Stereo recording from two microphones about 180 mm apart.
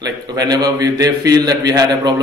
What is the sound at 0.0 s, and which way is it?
A man's voice, 20° right (ahead or behind).